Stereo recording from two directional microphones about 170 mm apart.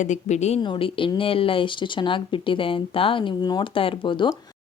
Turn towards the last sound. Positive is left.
turn(degrees=30)  # may be behind; listen again after turning